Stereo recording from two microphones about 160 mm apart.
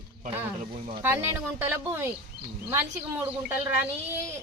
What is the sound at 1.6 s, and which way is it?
A woman's voice, 15° right (ahead or behind).